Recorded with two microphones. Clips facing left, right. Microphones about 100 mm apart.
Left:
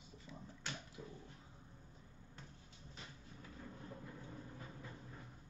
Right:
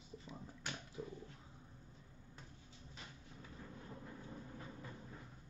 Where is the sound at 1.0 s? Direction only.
30° right (ahead or behind).